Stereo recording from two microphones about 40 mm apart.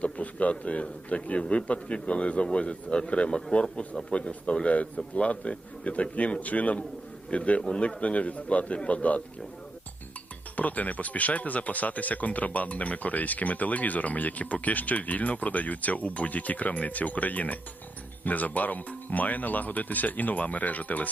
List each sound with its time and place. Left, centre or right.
0.0 s a sound: left
0.5 s a man's voice: left
10.6 s speech: left